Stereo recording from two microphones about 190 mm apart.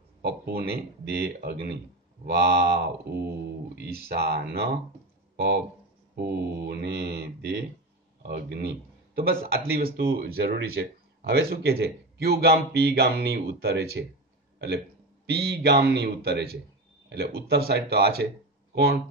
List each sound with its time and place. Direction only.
0.2 s speech: 55° right (ahead or behind)
5.3 s a sound: 60° right (ahead or behind)
6.1 s speech: 60° right (ahead or behind)
15.2 s speech: 60° right (ahead or behind)